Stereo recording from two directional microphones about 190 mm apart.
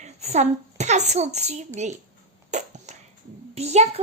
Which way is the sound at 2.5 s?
40° right (ahead or behind).